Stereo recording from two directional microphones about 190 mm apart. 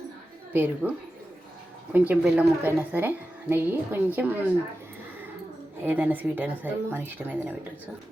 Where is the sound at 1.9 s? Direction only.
10° right (ahead or behind).